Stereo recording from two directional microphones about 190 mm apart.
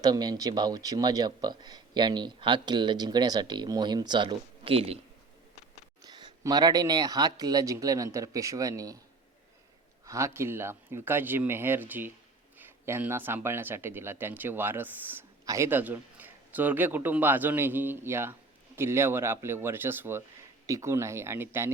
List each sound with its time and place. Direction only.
0.0 s speech: 20° right (ahead or behind)
6.0 s speech: 20° right (ahead or behind)
10.1 s speech: 15° right (ahead or behind)